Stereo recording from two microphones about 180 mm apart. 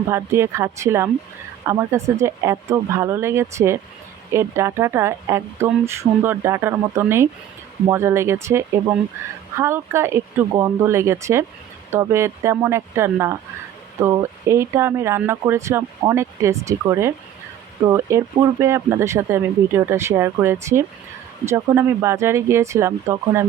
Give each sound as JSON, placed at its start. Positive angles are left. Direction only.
{"t": 0.1, "sound": "speech", "side_deg": -15}